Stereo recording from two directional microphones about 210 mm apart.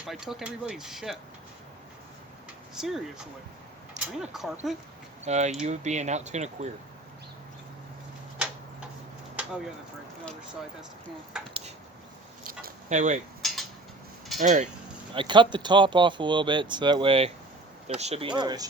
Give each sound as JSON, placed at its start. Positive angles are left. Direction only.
{"t": 0.1, "sound": "speech", "side_deg": 0}
{"t": 2.7, "sound": "speech", "side_deg": 0}
{"t": 5.2, "sound": "speech", "side_deg": -30}
{"t": 12.5, "sound": "a sound", "side_deg": -40}
{"t": 13.4, "sound": "a sound", "side_deg": 0}
{"t": 14.3, "sound": "speech", "side_deg": -35}
{"t": 15.1, "sound": "speech", "side_deg": -25}